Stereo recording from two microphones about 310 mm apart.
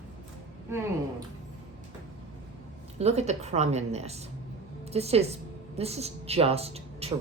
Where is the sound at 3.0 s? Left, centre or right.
Right.